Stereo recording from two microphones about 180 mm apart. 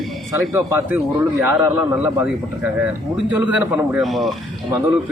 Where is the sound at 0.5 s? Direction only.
10° right (ahead or behind).